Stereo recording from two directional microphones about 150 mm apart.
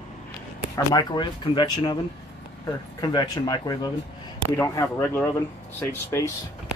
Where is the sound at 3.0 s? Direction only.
30° left (ahead or behind).